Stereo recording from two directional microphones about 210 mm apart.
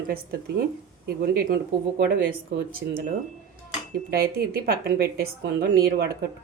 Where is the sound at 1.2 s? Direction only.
45° right (ahead or behind).